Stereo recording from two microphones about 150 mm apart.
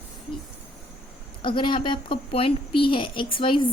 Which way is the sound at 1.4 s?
35° left (ahead or behind).